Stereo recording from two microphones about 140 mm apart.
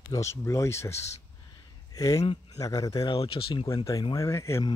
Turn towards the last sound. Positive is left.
turn(degrees=20)  # may be behind; listen again after turning